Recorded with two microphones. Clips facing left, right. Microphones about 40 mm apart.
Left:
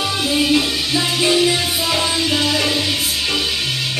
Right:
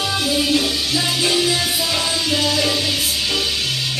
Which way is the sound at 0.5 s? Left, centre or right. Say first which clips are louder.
Left 2 dB; left.